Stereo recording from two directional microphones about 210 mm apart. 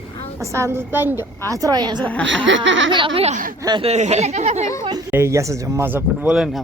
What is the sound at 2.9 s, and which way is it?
Speech, 25° right (ahead or behind).